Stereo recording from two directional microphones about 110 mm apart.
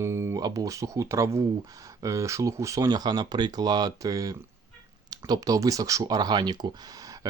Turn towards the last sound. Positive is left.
turn(degrees=-35)  # may be behind; listen again after turning